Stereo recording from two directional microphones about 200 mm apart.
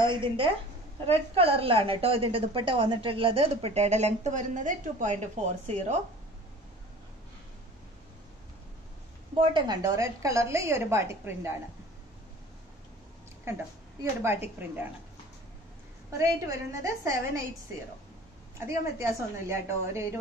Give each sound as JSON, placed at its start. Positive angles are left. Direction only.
{"t": 0.0, "sound": "a woman's voice", "side_deg": -25}
{"t": 9.4, "sound": "a woman's voice", "side_deg": -25}
{"t": 14.2, "sound": "a woman's voice", "side_deg": -10}
{"t": 16.2, "sound": "a woman's voice", "side_deg": -15}
{"t": 18.7, "sound": "a woman's voice", "side_deg": -15}